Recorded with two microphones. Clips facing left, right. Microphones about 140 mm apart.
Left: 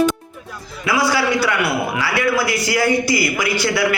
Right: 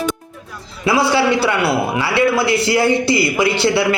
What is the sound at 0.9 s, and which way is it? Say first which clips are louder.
A man's voice: right 3 dB; 30° right (ahead or behind).